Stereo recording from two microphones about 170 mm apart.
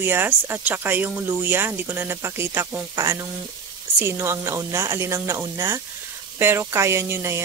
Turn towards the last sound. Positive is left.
turn(degrees=-15)  # may be behind; listen again after turning